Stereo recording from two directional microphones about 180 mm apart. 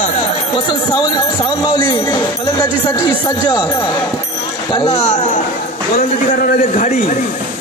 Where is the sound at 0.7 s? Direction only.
25° left (ahead or behind).